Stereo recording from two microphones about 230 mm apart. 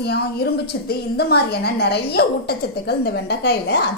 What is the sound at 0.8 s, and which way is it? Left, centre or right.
A woman's voice, left.